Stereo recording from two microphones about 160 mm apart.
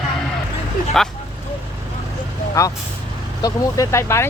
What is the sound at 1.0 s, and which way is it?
Speech, centre (ahead or behind).